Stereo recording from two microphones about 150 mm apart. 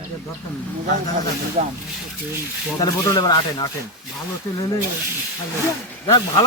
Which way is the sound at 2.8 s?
25° left (ahead or behind).